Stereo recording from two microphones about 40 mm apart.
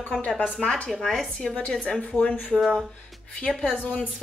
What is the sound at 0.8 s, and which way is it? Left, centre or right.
Speech, centre.